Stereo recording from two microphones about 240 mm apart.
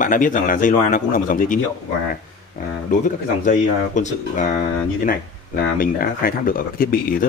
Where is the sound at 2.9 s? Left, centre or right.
Left.